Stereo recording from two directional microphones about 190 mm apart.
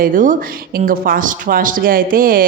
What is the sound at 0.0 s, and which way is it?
Speech, 45° right (ahead or behind).